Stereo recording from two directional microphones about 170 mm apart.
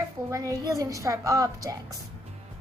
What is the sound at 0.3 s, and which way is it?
A woman's voice, 20° right (ahead or behind).